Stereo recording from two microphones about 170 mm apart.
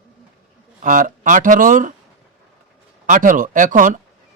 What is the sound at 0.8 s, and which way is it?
A man's voice, 50° right (ahead or behind).